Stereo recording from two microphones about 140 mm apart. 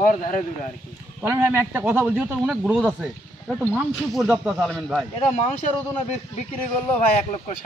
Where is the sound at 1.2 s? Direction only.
20° right (ahead or behind).